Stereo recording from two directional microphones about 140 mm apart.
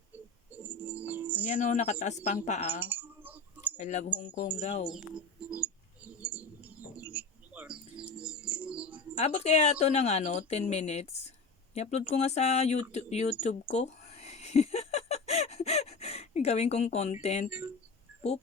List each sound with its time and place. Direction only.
0.5 s music: 10° right (ahead or behind)
1.5 s speech: 60° left (ahead or behind)
2.8 s typing: 15° right (ahead or behind)
3.8 s speech: 55° left (ahead or behind)
4.6 s speech: 50° left (ahead or behind)
4.9 s speech: 5° right (ahead or behind)
6.1 s bird: 10° right (ahead or behind)
9.1 s speech: 50° left (ahead or behind)
13.4 s a sound: 55° left (ahead or behind)